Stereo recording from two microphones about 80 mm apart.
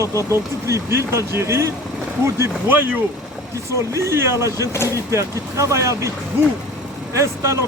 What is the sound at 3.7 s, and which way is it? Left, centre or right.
Speech, right.